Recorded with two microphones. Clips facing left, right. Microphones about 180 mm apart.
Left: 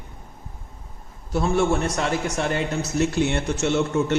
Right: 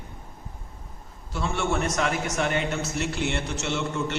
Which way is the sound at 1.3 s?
40° left (ahead or behind).